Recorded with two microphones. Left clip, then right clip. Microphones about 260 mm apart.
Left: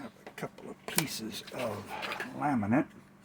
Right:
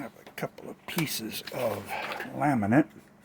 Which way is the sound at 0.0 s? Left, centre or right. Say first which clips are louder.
Right 5 dB; right.